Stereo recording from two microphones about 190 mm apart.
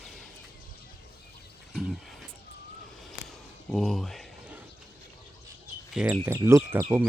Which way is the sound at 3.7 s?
Centre (ahead or behind).